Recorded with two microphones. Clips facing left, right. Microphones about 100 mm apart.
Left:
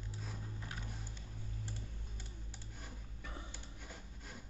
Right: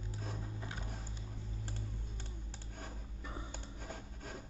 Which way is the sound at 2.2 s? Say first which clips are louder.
Right 3 dB; 55° right (ahead or behind).